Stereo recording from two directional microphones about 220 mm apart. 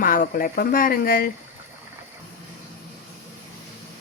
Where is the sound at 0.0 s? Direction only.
40° left (ahead or behind).